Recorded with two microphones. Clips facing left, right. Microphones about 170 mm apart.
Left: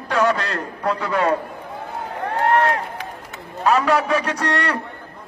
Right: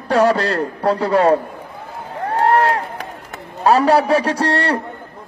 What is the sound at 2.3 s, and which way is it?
Run, 35° right (ahead or behind).